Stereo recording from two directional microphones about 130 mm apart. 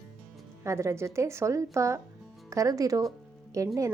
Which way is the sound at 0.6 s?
20° right (ahead or behind).